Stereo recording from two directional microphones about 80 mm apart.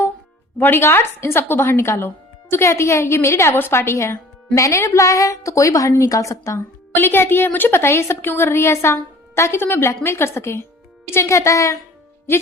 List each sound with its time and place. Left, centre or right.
0.6 s speech: left
6.9 s a woman's voice: left